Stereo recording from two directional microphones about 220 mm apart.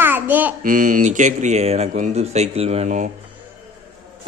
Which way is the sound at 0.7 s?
35° right (ahead or behind).